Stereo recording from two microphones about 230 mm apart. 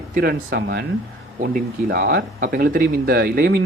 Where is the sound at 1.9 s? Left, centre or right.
Right.